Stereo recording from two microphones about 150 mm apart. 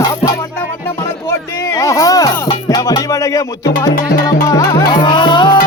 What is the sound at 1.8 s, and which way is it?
Music, 20° left (ahead or behind).